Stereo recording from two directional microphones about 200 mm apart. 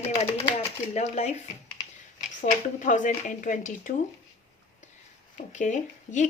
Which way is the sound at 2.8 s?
40° left (ahead or behind).